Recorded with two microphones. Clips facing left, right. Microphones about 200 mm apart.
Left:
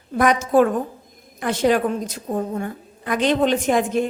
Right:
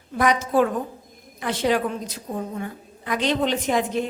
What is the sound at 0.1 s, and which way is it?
A woman's voice, 50° left (ahead or behind).